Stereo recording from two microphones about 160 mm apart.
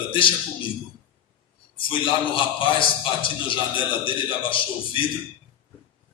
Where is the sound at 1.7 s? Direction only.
35° left (ahead or behind).